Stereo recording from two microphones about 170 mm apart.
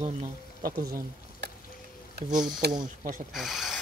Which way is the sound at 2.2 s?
75° right (ahead or behind).